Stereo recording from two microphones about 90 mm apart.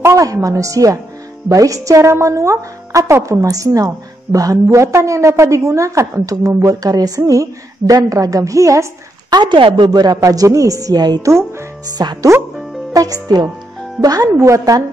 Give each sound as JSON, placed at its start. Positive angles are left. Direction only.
{"t": 0.0, "sound": "a woman's voice", "side_deg": -35}
{"t": 9.3, "sound": "speech", "side_deg": -60}
{"t": 9.8, "sound": "a woman's voice", "side_deg": -45}
{"t": 11.2, "sound": "a woman's voice", "side_deg": -30}
{"t": 11.9, "sound": "a woman's voice", "side_deg": -50}